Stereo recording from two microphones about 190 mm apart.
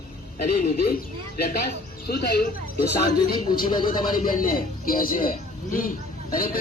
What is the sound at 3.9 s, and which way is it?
A man's voice, 45° left (ahead or behind).